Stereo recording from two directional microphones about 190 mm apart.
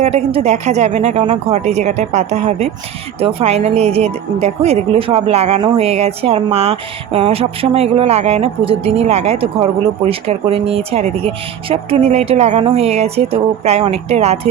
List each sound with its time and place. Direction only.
0.0 s speech: 30° right (ahead or behind)